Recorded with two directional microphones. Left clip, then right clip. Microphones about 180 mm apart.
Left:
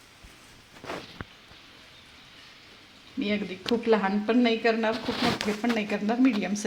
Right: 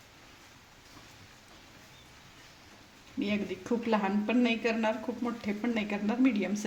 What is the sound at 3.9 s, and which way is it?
Speech, 25° left (ahead or behind).